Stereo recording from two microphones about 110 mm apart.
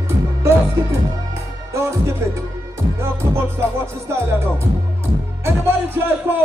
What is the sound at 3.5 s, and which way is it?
Music, 25° right (ahead or behind).